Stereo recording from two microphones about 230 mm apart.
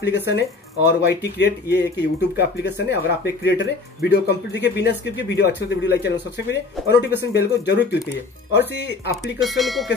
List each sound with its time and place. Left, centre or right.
0.3 s speech: left
9.4 s speech: centre